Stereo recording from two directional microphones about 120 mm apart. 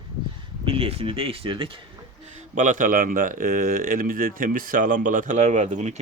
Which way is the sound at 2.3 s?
90° right.